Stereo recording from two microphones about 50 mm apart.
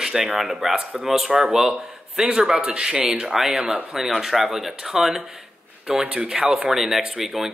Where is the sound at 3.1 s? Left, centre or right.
Centre.